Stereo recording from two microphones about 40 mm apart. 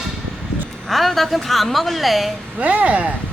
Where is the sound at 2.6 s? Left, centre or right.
Right.